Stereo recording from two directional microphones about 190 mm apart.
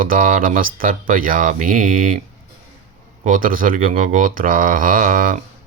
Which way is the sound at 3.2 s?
45° right (ahead or behind).